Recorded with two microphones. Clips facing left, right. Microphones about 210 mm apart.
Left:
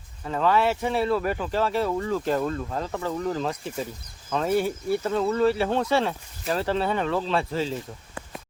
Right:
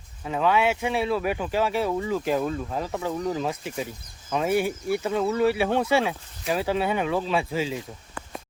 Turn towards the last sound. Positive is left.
turn(degrees=-10)  # may be behind; listen again after turning